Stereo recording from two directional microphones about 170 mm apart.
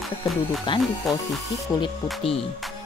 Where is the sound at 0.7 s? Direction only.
30° left (ahead or behind).